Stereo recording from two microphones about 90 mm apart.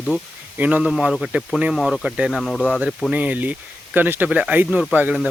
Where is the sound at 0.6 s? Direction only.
15° right (ahead or behind).